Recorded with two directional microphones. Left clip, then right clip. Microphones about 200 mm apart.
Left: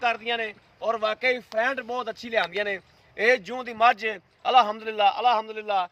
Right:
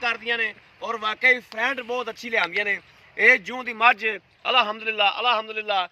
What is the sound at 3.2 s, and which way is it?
A man's voice, 55° left (ahead or behind).